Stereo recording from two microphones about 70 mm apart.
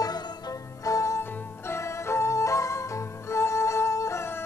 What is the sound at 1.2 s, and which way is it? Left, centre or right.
Music, left.